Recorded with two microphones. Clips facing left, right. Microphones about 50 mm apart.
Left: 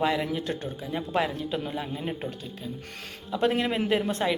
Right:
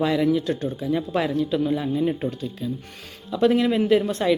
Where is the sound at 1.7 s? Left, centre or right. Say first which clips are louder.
Right 9 dB; centre.